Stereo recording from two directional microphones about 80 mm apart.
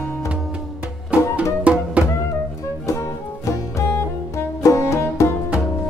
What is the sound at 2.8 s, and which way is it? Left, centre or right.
Music, left.